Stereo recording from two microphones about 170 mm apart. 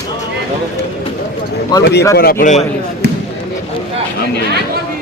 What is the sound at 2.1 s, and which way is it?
Speech, 60° left (ahead or behind).